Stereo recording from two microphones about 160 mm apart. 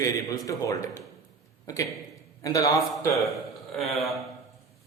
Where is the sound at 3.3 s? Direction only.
Centre (ahead or behind).